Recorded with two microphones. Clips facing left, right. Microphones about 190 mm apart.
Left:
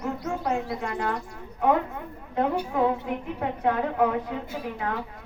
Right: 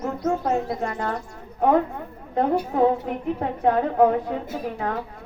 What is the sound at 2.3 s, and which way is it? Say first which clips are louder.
A woman's voice: right 3 dB; 40° right (ahead or behind).